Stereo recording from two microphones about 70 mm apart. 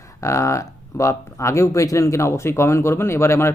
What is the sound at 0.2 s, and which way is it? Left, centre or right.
A man's voice, left.